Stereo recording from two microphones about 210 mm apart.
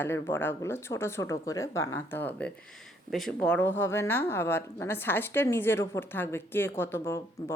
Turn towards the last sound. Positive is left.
turn(degrees=10)  # may be behind; listen again after turning